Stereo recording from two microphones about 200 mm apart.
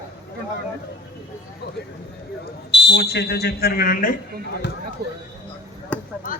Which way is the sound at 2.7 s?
60° left (ahead or behind).